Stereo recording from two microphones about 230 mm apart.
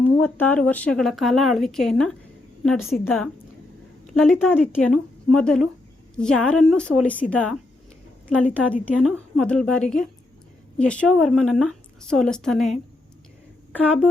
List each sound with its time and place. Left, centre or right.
0.0 s speech: centre
8.5 s speech: centre